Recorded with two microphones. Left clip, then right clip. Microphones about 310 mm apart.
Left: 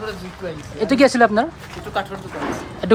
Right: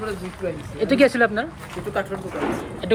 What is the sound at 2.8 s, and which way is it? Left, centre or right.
Speech, left.